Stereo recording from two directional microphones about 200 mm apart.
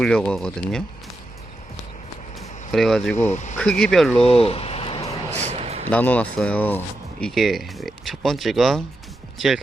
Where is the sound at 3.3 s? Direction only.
35° left (ahead or behind).